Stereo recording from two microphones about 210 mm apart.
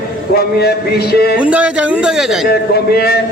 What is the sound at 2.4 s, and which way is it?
Speech, 50° left (ahead or behind).